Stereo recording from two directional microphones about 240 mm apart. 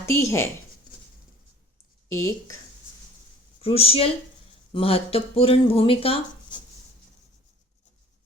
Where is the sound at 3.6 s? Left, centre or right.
Left.